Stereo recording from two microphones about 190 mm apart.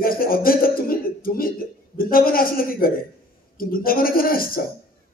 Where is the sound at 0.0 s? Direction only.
50° left (ahead or behind).